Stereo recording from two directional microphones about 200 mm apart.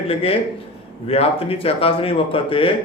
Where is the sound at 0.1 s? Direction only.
30° left (ahead or behind).